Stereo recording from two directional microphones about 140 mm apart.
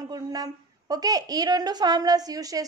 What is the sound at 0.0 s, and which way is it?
A woman's voice, 25° right (ahead or behind).